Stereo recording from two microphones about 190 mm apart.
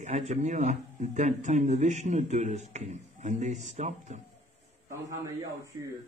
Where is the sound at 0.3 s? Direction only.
35° right (ahead or behind).